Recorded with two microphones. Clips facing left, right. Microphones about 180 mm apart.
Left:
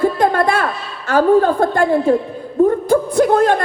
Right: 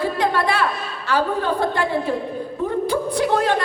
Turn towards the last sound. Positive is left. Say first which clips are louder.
# left 6 dB
turn(degrees=50)  # may be behind; listen again after turning